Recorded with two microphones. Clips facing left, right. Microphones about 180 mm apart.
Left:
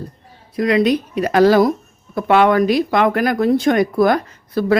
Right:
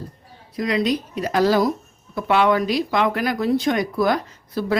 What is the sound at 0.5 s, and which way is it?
Speech, 60° left (ahead or behind).